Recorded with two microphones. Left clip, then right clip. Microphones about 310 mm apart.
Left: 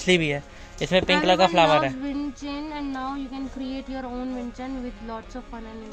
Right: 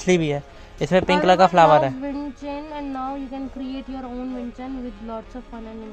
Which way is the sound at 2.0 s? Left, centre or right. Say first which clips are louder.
Right 1 dB; right.